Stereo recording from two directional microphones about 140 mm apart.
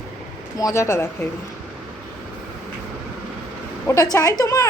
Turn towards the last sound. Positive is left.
turn(degrees=25)  # may be behind; listen again after turning